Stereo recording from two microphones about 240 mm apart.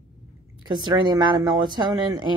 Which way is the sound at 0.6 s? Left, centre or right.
Centre.